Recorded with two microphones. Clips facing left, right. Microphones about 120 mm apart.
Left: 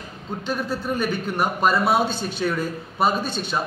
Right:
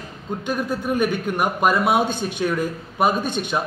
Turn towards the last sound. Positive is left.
turn(degrees=-15)  # may be behind; listen again after turning